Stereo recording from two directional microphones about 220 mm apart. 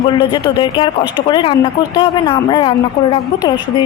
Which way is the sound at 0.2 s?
20° left (ahead or behind).